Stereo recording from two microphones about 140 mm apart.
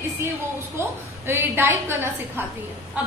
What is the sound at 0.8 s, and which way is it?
A woman's voice, 15° right (ahead or behind).